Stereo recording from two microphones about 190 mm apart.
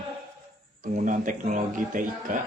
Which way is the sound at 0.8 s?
45° right (ahead or behind).